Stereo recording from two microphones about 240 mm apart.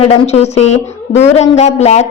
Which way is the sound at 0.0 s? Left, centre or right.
Left.